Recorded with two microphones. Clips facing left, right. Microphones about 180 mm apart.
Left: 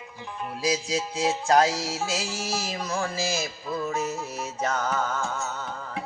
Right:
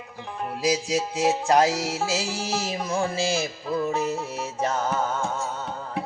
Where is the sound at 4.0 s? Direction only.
60° right (ahead or behind).